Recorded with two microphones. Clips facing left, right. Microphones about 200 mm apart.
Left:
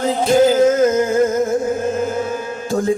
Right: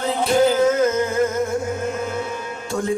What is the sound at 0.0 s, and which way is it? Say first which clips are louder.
Music: left 4 dB; 35° left (ahead or behind).